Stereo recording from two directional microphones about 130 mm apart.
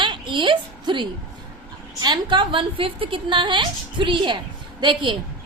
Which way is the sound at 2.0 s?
35° right (ahead or behind).